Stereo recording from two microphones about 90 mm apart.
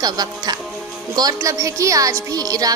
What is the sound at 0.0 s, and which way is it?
A woman's voice, 45° right (ahead or behind).